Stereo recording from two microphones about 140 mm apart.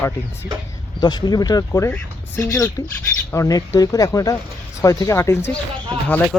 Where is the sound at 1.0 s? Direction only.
30° left (ahead or behind).